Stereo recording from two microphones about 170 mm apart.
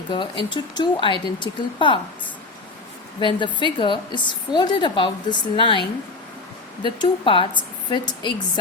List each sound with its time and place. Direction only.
0.1 s a woman's voice: 30° left (ahead or behind)
3.2 s a woman's voice: 30° left (ahead or behind)
6.8 s a woman's voice: 30° left (ahead or behind)